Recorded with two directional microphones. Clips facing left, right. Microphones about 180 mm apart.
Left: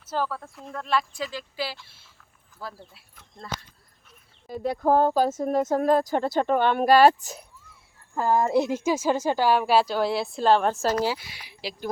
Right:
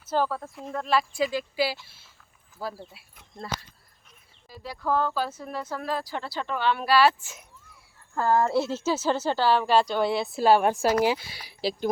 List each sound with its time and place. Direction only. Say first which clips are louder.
0.1 s speech: right 3 dB; centre (ahead or behind)
4.4 s speech: left 7 dB; 50° left (ahead or behind)
8.1 s a woman's voice: left 1 dB; 15° left (ahead or behind); by 11.2 s 15° right (ahead or behind)
11.2 s speech: right 6 dB; 35° right (ahead or behind)